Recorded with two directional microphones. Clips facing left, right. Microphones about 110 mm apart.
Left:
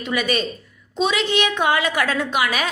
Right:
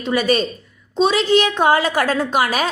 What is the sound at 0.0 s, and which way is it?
A woman's voice, 35° right (ahead or behind).